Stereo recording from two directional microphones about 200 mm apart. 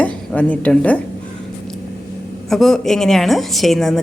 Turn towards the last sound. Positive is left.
turn(degrees=0)  # may be behind; listen again after turning